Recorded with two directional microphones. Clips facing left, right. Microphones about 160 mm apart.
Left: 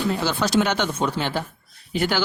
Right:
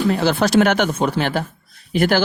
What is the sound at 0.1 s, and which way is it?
Speech, 60° right (ahead or behind).